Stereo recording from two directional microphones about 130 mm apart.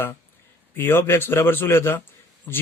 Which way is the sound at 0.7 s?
15° left (ahead or behind).